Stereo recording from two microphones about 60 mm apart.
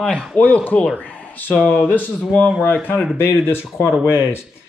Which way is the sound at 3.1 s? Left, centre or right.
Left.